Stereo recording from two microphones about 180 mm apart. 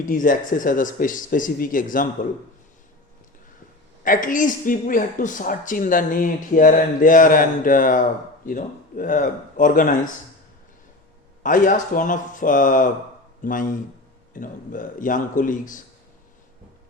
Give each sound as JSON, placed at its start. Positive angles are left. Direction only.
{"t": 0.0, "sound": "speech", "side_deg": 45}
{"t": 4.0, "sound": "speech", "side_deg": 50}
{"t": 11.4, "sound": "speech", "side_deg": 45}